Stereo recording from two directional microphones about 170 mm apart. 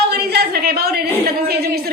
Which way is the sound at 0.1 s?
70° right (ahead or behind).